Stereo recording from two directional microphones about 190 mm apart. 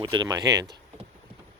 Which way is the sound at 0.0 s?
20° right (ahead or behind).